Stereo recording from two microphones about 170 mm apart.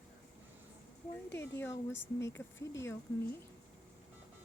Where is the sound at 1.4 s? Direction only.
15° left (ahead or behind).